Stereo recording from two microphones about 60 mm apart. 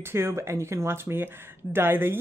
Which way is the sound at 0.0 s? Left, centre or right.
Right.